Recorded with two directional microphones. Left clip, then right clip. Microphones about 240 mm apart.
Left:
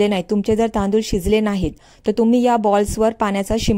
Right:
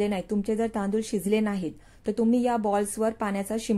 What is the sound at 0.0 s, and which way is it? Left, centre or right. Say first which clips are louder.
Speech: left 10 dB; left.